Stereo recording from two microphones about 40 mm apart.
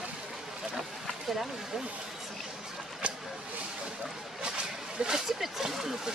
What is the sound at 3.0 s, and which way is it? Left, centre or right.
Vehicle, right.